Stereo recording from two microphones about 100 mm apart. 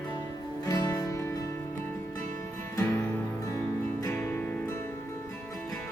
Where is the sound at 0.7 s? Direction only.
40° left (ahead or behind).